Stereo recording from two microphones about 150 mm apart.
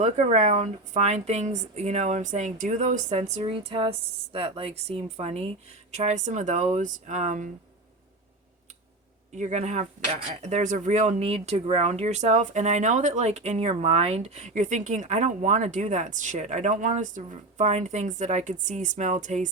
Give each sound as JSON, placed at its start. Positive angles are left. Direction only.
{"t": 0.0, "sound": "speech", "side_deg": -50}
{"t": 9.3, "sound": "speech", "side_deg": -50}